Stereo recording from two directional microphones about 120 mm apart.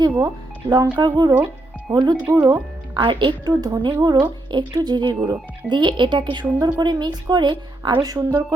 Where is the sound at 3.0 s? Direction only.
40° right (ahead or behind).